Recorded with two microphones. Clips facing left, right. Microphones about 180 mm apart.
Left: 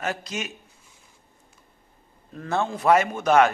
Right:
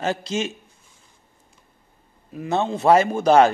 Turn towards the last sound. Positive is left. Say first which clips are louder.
# right 4 dB
turn(degrees=-30)  # may be behind; listen again after turning